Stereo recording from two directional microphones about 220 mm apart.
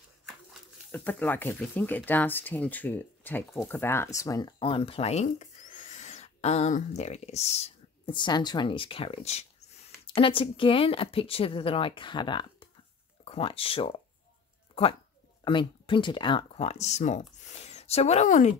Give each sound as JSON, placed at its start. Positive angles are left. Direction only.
{"t": 0.5, "sound": "speech", "side_deg": 5}
{"t": 15.4, "sound": "speech", "side_deg": 20}